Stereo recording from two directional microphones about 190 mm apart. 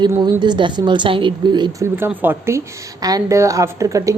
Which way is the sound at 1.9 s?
10° right (ahead or behind).